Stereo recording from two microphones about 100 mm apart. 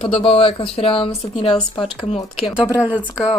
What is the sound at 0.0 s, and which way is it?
Speech, 60° left (ahead or behind).